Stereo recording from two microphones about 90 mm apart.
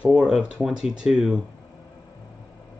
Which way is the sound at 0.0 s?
10° right (ahead or behind).